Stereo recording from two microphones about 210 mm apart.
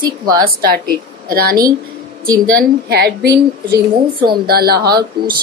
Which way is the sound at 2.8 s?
50° right (ahead or behind).